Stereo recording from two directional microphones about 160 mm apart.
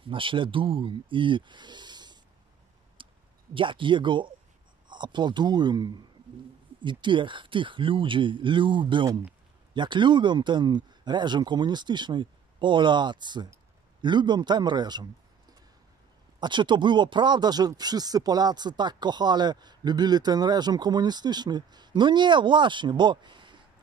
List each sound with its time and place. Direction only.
0.0 s speech: 30° right (ahead or behind)
3.0 s clicking: 30° right (ahead or behind)
3.5 s speech: 30° right (ahead or behind)
16.3 s speech: 30° right (ahead or behind)